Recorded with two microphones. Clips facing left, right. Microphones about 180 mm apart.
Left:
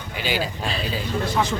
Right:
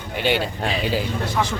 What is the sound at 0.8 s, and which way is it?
Speech, 65° right (ahead or behind).